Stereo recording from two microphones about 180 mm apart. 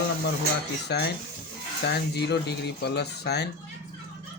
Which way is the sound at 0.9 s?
65° left (ahead or behind).